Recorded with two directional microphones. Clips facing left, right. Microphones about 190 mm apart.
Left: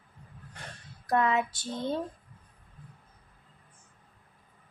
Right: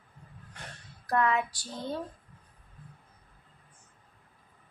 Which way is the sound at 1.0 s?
20° left (ahead or behind).